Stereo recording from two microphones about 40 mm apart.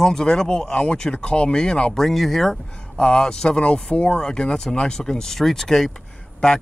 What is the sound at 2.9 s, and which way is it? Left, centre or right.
Speech, left.